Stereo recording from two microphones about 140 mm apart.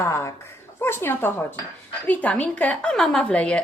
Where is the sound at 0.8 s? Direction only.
15° left (ahead or behind).